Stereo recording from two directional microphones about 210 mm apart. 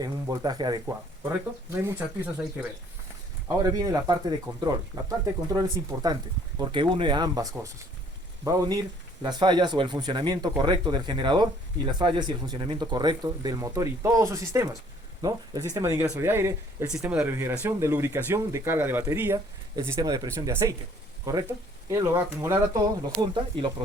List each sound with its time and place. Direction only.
0.0 s speech: 20° right (ahead or behind)
3.6 s speech: 15° right (ahead or behind)